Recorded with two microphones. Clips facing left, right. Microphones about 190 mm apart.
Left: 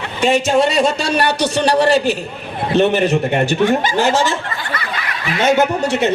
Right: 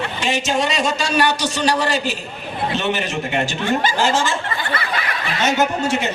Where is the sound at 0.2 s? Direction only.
60° left (ahead or behind).